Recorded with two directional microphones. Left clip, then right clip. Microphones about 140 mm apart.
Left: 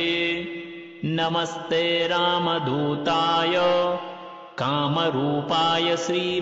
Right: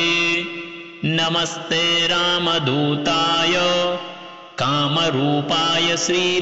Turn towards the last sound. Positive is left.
turn(degrees=30)  # may be behind; listen again after turning